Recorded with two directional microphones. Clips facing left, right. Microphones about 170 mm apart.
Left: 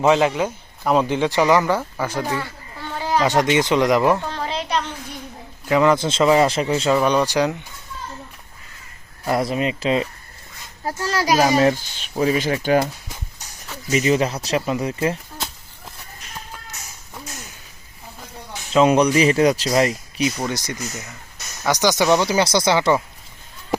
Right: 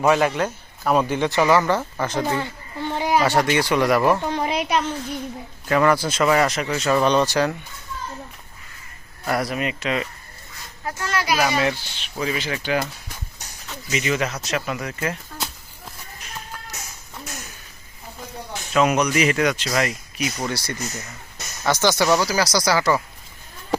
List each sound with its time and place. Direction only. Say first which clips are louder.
0.0 s speech: left 2 dB; 15° left (ahead or behind)
2.2 s a sound: right 1 dB; 20° right (ahead or behind)
3.2 s speech: left 2 dB; 20° left (ahead or behind)
4.2 s a sound: right 3 dB; 15° right (ahead or behind)
5.6 s speech: left 2 dB; 15° left (ahead or behind)
7.0 s speech: left 1 dB; 10° left (ahead or behind)
9.2 s speech: left 3 dB; 25° left (ahead or behind); by 12.5 s 40° left (ahead or behind)
13.9 s speech: left 5 dB; 35° left (ahead or behind)
18.7 s speech: left 4 dB; 30° left (ahead or behind)
20.4 s speech: left 1 dB; 15° left (ahead or behind)